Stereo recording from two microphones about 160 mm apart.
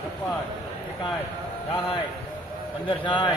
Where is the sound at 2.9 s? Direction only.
30° left (ahead or behind).